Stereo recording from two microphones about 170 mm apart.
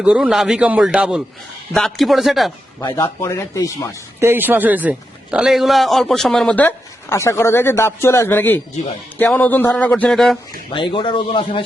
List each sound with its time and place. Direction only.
0.0 s a man's voice: 5° right (ahead or behind)
2.8 s speech: 20° left (ahead or behind)
4.2 s a man's voice: 10° right (ahead or behind)
10.7 s speech: 30° left (ahead or behind)